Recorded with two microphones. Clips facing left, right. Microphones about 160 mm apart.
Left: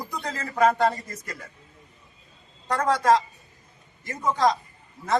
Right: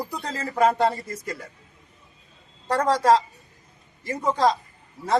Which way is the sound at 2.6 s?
35° right (ahead or behind).